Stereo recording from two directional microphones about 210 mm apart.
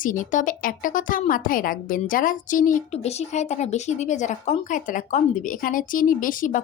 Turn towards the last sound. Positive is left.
turn(degrees=40)  # may be behind; listen again after turning